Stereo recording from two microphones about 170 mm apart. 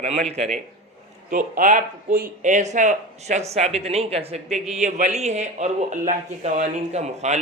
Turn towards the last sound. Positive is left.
turn(degrees=-40)  # may be behind; listen again after turning